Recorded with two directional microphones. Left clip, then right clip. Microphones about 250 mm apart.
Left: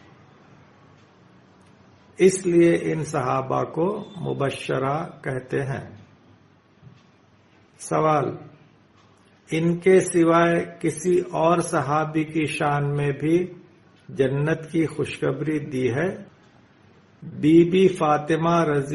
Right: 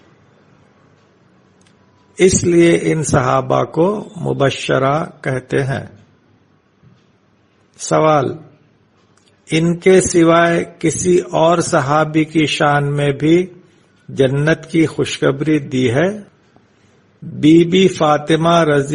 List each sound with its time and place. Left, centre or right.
2.1 s a man's voice: right
7.9 s a man's voice: right
9.5 s a man's voice: right
17.4 s a man's voice: right